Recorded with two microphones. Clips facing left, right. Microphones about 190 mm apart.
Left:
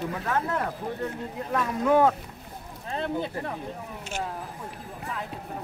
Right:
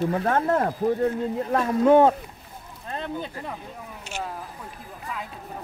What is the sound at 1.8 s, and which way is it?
Speech, 25° right (ahead or behind).